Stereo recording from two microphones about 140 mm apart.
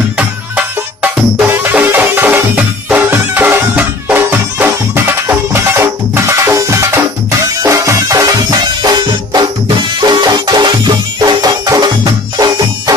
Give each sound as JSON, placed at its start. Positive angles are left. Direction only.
{"t": 0.6, "sound": "music", "side_deg": -15}